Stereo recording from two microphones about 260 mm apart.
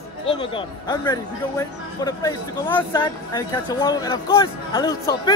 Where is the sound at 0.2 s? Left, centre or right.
Left.